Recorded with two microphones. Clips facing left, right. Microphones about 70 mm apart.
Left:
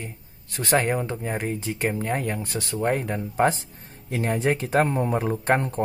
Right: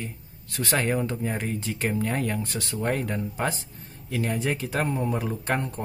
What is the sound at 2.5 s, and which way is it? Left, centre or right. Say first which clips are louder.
Speech: left 7 dB; left.